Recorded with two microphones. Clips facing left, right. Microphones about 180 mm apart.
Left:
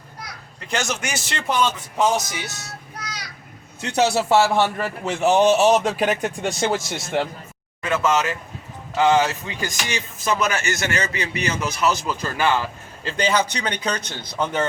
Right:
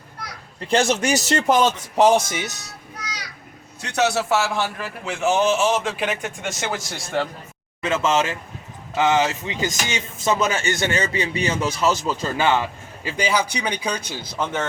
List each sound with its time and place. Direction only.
0.7 s a man's voice: 30° right (ahead or behind)
3.8 s a man's voice: 30° left (ahead or behind)
7.8 s speech: 25° right (ahead or behind)
13.0 s speech: 10° right (ahead or behind)